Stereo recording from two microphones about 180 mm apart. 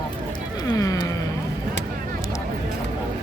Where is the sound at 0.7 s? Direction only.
20° left (ahead or behind).